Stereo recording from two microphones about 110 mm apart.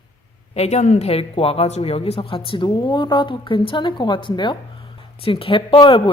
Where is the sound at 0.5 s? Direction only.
75° left (ahead or behind).